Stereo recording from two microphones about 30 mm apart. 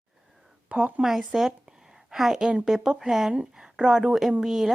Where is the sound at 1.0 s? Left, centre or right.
Centre.